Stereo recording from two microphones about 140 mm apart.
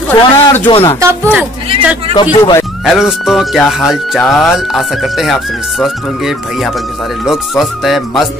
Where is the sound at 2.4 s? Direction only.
20° left (ahead or behind).